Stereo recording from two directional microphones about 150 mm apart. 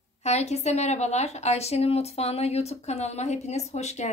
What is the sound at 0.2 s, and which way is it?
A woman's voice, 45° left (ahead or behind).